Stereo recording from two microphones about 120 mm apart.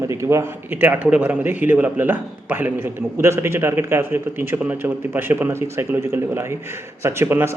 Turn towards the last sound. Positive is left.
turn(degrees=-20)  # may be behind; listen again after turning